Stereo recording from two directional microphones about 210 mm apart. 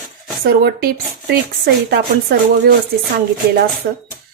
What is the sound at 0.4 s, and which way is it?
Speech, 45° right (ahead or behind).